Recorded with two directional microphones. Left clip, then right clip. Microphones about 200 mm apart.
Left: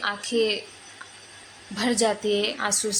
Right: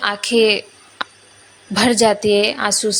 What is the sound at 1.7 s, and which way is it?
Speech, 40° right (ahead or behind).